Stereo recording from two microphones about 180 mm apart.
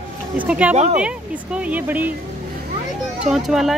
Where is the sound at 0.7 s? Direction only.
40° right (ahead or behind).